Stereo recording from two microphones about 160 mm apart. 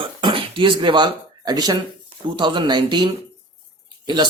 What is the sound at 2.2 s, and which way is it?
Speech, 30° right (ahead or behind).